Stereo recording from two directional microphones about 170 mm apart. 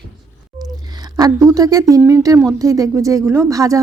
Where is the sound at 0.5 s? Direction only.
25° right (ahead or behind).